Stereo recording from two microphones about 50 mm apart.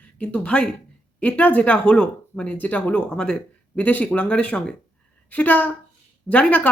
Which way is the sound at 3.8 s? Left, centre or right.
Left.